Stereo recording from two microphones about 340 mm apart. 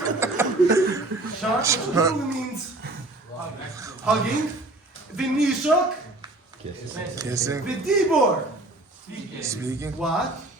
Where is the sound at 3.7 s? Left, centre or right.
Centre.